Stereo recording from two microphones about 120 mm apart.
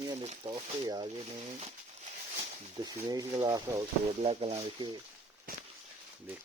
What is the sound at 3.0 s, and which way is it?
Speech, 30° right (ahead or behind).